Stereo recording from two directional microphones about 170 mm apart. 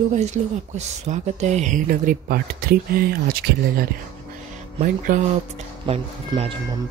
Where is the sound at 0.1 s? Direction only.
40° right (ahead or behind); by 3.8 s 60° right (ahead or behind).